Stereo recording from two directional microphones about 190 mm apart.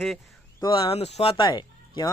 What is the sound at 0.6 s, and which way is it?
Speech, 25° left (ahead or behind).